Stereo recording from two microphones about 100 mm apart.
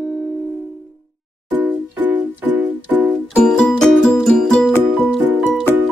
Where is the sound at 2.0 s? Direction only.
15° right (ahead or behind).